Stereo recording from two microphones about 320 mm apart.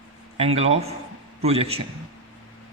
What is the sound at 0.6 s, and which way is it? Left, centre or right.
A man's voice, centre.